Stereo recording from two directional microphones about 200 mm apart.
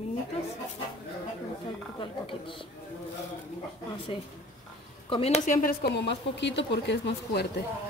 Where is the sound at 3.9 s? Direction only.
25° left (ahead or behind); by 7.4 s 60° left (ahead or behind).